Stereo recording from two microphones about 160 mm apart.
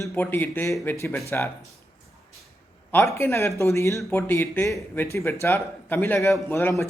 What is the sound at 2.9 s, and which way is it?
A man's voice, 15° left (ahead or behind).